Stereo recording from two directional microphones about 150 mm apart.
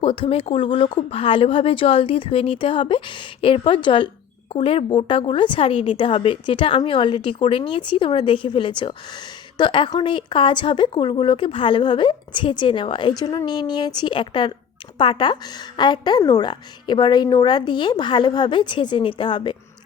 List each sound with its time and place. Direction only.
0.0 s speech: 35° left (ahead or behind)